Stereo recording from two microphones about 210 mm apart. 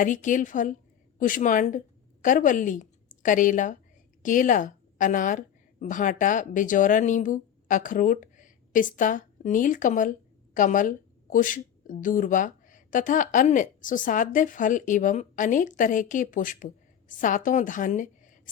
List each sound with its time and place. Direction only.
0.0 s a woman's voice: 35° left (ahead or behind)